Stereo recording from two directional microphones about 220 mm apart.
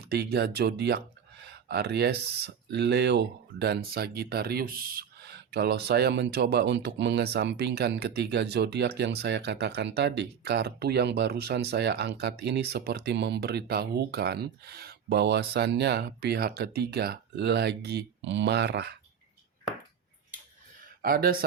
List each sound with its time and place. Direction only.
0.0 s speech: 45° right (ahead or behind)
21.0 s speech: 40° right (ahead or behind)